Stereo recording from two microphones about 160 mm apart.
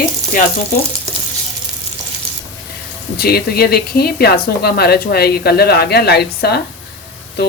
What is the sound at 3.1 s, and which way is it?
Speech, 75° left (ahead or behind).